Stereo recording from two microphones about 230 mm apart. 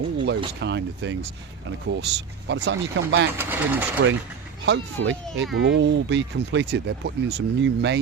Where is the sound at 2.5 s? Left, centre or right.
Right.